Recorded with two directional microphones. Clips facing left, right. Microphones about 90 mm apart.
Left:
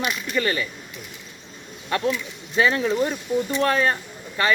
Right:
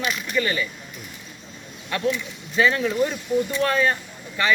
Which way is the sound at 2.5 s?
30° left (ahead or behind).